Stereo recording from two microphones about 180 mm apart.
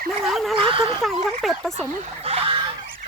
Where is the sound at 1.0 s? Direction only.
Centre (ahead or behind).